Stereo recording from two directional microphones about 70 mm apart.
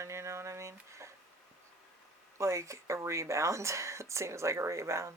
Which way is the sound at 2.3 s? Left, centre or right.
Right.